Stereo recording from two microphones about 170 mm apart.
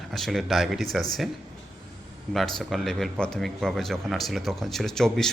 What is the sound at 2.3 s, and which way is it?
A man's voice, centre (ahead or behind).